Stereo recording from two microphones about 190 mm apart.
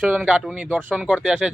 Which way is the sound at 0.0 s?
5° right (ahead or behind).